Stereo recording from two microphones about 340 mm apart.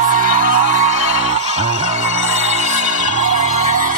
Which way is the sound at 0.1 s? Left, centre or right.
Right.